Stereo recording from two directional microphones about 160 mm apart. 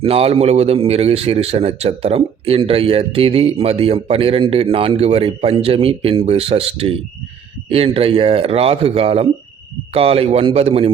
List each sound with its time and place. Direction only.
0.0 s a man's voice: 35° right (ahead or behind)